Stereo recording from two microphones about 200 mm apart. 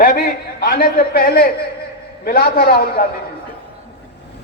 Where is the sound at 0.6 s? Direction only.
45° left (ahead or behind).